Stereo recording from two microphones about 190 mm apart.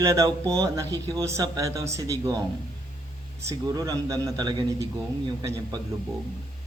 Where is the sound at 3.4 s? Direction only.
20° right (ahead or behind).